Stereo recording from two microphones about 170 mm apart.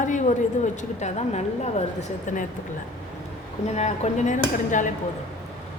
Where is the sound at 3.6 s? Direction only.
40° left (ahead or behind).